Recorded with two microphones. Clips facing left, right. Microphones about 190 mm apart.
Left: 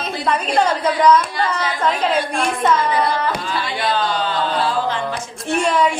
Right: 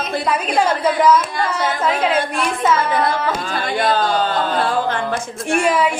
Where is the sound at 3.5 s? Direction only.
50° right (ahead or behind).